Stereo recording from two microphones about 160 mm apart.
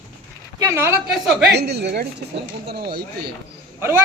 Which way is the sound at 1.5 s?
90° right.